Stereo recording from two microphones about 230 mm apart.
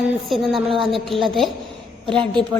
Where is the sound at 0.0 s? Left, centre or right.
Centre.